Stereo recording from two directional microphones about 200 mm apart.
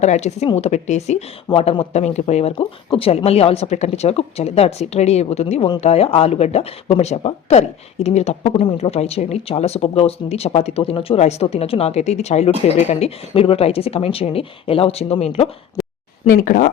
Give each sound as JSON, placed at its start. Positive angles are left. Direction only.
{"t": 0.0, "sound": "speech", "side_deg": 35}
{"t": 16.2, "sound": "speech", "side_deg": 45}